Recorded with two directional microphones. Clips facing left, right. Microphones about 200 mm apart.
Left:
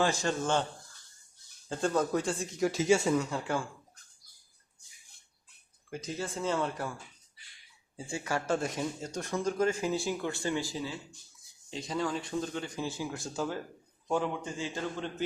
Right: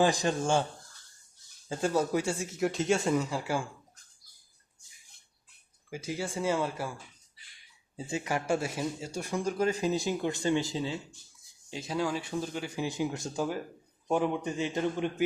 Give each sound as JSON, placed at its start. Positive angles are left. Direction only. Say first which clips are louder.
{"t": 0.0, "sound": "speech", "louder": "right 3 dB", "side_deg": -15}
{"t": 1.7, "sound": "speech", "louder": "right 1 dB", "side_deg": -10}
{"t": 5.9, "sound": "speech", "louder": "right 2 dB", "side_deg": -10}
{"t": 7.9, "sound": "speech", "louder": "right 2 dB", "side_deg": -20}
{"t": 11.7, "sound": "speech", "louder": "right 1 dB", "side_deg": -5}